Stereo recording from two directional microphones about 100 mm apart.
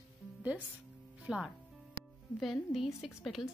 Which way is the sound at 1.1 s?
10° right (ahead or behind).